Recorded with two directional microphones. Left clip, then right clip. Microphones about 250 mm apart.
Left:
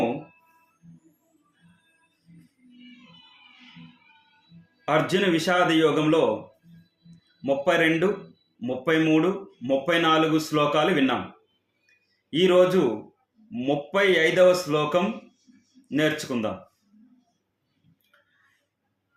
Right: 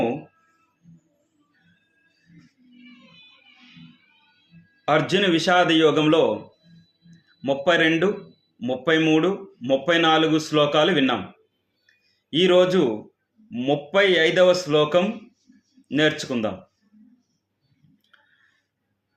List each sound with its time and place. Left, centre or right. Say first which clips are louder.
4.9 s speech: right 3 dB; centre
12.3 s speech: right 2 dB; centre